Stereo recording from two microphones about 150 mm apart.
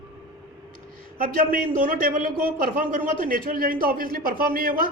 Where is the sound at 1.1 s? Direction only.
70° right (ahead or behind).